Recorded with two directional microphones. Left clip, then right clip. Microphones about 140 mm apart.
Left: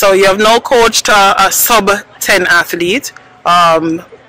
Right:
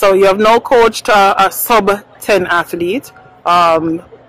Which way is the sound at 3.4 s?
15° left (ahead or behind).